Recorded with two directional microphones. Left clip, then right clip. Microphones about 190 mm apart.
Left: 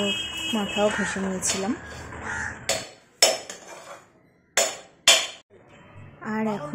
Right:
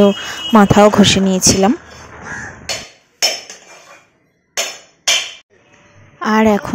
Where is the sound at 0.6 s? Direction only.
50° right (ahead or behind).